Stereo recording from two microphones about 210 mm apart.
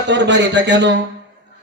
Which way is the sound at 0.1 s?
55° right (ahead or behind).